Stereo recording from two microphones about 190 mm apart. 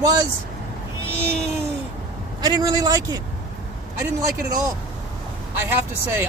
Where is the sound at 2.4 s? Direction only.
20° right (ahead or behind).